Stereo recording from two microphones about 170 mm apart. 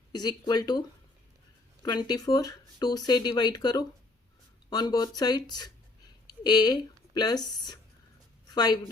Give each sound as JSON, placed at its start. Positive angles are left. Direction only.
{"t": 0.1, "sound": "speech", "side_deg": 25}
{"t": 1.8, "sound": "speech", "side_deg": 25}